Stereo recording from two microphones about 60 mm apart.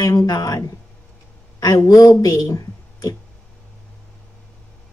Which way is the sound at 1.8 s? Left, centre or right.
Left.